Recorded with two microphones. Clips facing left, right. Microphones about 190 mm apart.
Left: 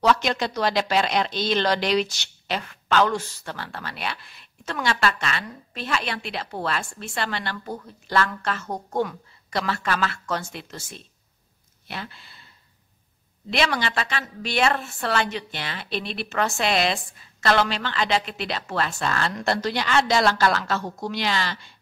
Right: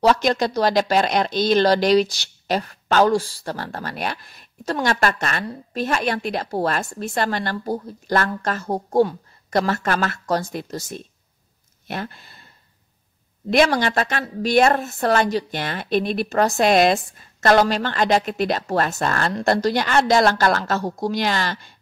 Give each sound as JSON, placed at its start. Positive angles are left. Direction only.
{"t": 0.0, "sound": "a woman's voice", "side_deg": -40}
{"t": 7.5, "sound": "speech", "side_deg": -35}
{"t": 9.5, "sound": "a woman's voice", "side_deg": -45}
{"t": 13.5, "sound": "a woman's voice", "side_deg": -45}